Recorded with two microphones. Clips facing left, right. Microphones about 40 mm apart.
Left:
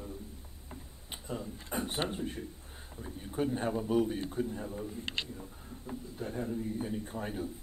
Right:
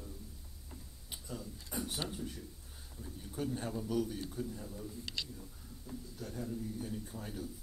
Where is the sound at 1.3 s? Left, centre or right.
Left.